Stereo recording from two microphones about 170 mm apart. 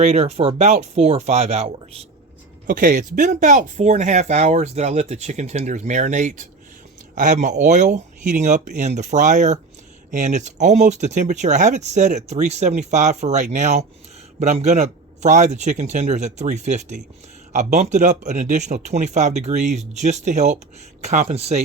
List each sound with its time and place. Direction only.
0.0 s speech: 40° right (ahead or behind)
2.6 s speech: 55° right (ahead or behind)